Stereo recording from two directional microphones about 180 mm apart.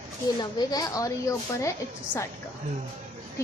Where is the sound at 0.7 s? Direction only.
20° left (ahead or behind).